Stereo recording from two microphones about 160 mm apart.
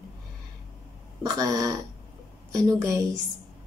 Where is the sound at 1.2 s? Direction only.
20° right (ahead or behind).